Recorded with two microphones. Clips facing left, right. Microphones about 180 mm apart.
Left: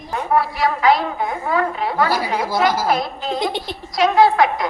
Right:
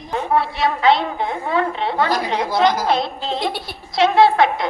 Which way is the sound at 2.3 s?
5° left (ahead or behind).